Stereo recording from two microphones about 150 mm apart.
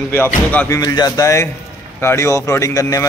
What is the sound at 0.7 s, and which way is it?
A man's voice, 25° left (ahead or behind).